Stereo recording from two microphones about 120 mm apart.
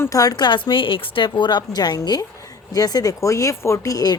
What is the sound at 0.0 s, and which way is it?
A woman's voice, 30° left (ahead or behind).